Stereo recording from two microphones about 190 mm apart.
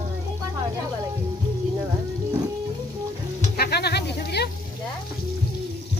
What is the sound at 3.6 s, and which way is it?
Speech, 60° left (ahead or behind).